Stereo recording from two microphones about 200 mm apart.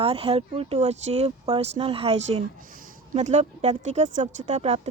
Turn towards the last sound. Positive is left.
turn(degrees=-30)  # may be behind; listen again after turning